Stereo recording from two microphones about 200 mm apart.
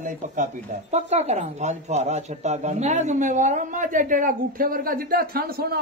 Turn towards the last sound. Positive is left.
turn(degrees=-50)  # may be behind; listen again after turning